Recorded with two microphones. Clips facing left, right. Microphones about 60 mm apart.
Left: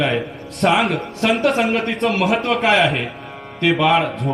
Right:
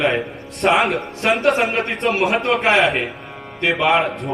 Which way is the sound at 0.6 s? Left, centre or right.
Right.